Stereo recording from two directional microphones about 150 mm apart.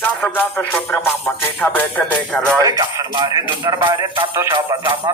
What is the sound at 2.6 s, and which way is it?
Speech, 25° right (ahead or behind).